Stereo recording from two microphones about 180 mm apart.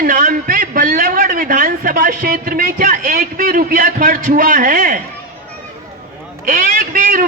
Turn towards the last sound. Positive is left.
turn(degrees=-50)  # may be behind; listen again after turning